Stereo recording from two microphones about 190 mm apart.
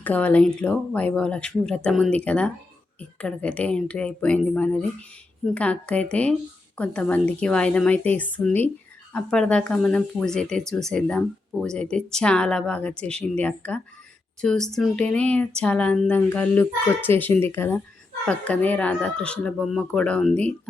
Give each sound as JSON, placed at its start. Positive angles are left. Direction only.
{"t": 0.0, "sound": "speech", "side_deg": 10}